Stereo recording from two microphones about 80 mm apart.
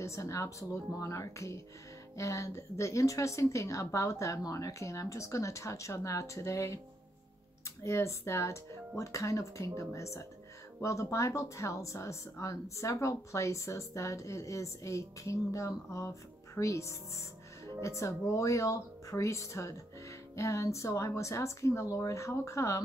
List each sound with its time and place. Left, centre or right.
0.0 s speech: left
7.8 s speech: left